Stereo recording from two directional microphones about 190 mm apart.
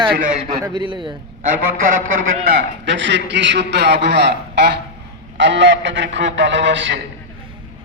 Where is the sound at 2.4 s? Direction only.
70° right (ahead or behind).